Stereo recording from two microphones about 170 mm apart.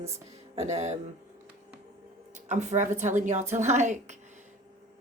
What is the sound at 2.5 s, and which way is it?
Speech, 45° right (ahead or behind).